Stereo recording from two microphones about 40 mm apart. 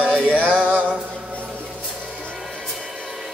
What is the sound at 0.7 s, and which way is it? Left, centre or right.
Music, right.